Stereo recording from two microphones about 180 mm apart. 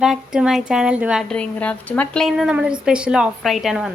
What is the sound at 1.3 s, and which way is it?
Speech, 5° left (ahead or behind).